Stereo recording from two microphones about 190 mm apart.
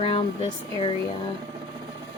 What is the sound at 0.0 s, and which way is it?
Speech, 30° left (ahead or behind).